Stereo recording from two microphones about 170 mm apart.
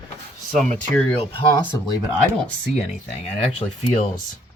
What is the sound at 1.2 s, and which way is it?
Speech, 30° left (ahead or behind).